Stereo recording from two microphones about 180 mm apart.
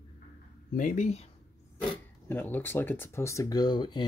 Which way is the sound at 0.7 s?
50° left (ahead or behind).